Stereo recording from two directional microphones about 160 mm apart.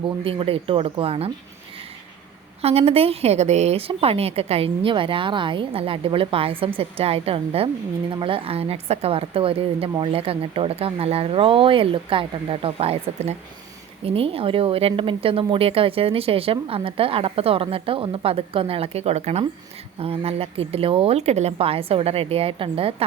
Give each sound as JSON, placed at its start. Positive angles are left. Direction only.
{"t": 0.3, "sound": "speech", "side_deg": -35}
{"t": 2.6, "sound": "speech", "side_deg": -40}